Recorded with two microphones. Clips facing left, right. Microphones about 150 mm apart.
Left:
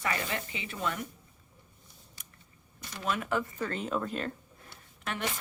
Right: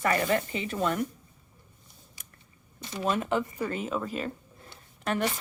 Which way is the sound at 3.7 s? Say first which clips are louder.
Right 1 dB; 5° right (ahead or behind).